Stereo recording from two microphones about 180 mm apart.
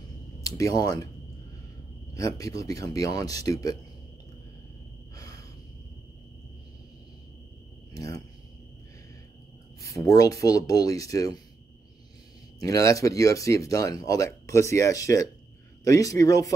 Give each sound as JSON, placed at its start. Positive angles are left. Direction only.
{"t": 0.6, "sound": "speech", "side_deg": 20}
{"t": 2.1, "sound": "speech", "side_deg": 20}
{"t": 5.1, "sound": "a sound", "side_deg": 20}
{"t": 7.9, "sound": "a sound", "side_deg": 20}
{"t": 9.8, "sound": "speech", "side_deg": 20}
{"t": 12.5, "sound": "speech", "side_deg": 20}